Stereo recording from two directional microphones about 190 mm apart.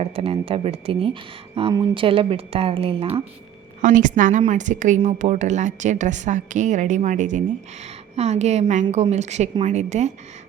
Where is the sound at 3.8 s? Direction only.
45° right (ahead or behind).